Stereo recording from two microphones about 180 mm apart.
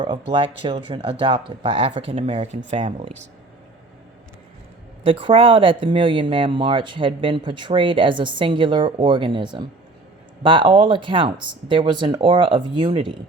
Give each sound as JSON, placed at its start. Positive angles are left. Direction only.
{"t": 0.0, "sound": "speech", "side_deg": -25}
{"t": 5.0, "sound": "speech", "side_deg": -30}